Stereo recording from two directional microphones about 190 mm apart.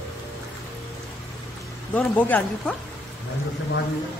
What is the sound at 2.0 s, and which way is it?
Speech, 10° left (ahead or behind).